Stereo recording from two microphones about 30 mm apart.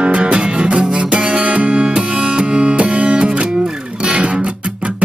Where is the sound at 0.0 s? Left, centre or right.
Right.